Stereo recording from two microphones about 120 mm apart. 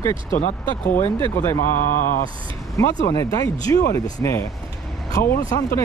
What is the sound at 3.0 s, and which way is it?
Speech, 30° left (ahead or behind).